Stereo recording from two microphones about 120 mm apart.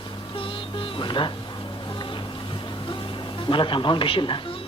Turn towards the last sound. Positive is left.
turn(degrees=45)  # may be behind; listen again after turning